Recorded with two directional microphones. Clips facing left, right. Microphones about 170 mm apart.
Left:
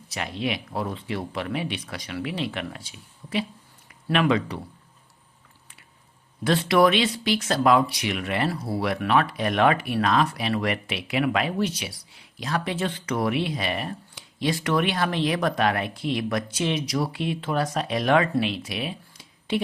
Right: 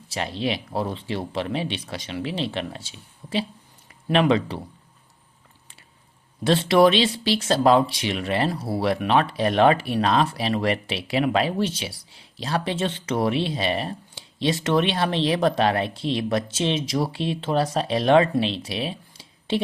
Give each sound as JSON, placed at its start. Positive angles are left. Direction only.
{"t": 0.1, "sound": "speech", "side_deg": -30}
{"t": 6.4, "sound": "speech", "side_deg": -25}